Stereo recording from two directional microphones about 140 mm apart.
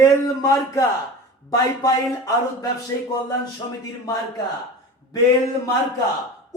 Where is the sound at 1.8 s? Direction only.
25° left (ahead or behind).